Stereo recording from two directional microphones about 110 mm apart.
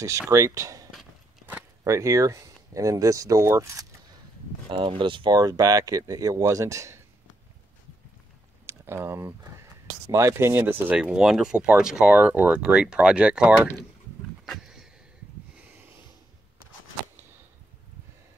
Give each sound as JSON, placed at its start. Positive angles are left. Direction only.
{"t": 0.3, "sound": "speech", "side_deg": -30}
{"t": 1.9, "sound": "speech", "side_deg": -30}
{"t": 4.6, "sound": "speech", "side_deg": -55}
{"t": 8.6, "sound": "speech", "side_deg": -25}
{"t": 14.4, "sound": "wild animals", "side_deg": 0}